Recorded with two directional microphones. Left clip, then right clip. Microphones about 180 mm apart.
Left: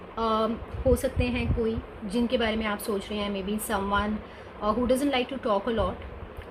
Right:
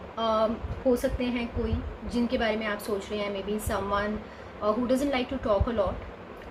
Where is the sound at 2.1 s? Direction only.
50° left (ahead or behind).